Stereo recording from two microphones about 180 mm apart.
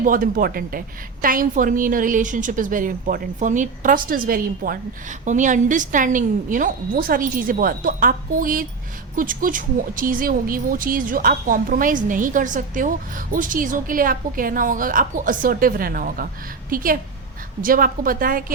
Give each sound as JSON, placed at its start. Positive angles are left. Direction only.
{"t": 0.0, "sound": "speech", "side_deg": -50}